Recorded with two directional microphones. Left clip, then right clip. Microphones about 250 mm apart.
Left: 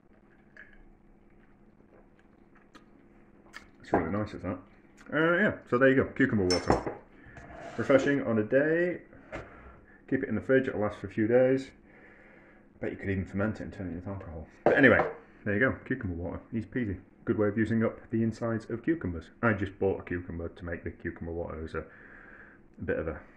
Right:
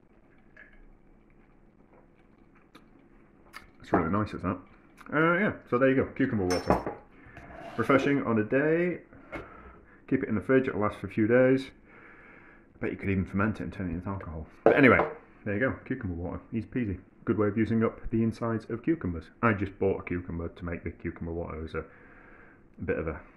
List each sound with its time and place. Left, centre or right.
3.8 s speech: right
4.9 s speech: centre
7.7 s speech: centre
10.0 s speech: right
12.7 s speech: right
15.4 s speech: centre
16.2 s speech: centre
22.8 s speech: centre